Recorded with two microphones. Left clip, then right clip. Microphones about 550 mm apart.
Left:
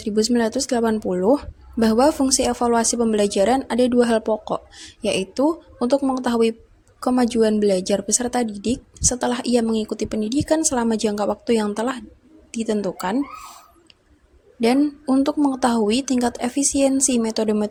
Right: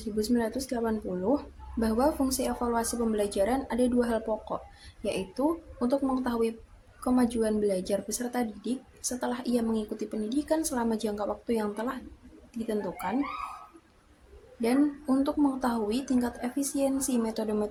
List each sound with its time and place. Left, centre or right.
0.2 s a woman's voice: right
14.6 s a woman's voice: centre